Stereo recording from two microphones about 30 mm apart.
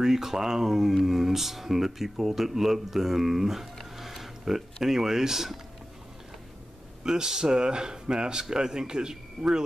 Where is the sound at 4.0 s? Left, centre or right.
Centre.